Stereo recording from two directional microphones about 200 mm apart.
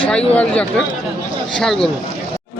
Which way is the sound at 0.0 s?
5° left (ahead or behind).